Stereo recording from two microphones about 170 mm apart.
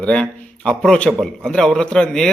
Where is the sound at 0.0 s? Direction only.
5° left (ahead or behind).